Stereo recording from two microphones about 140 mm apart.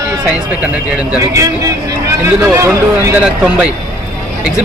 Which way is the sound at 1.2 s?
20° right (ahead or behind).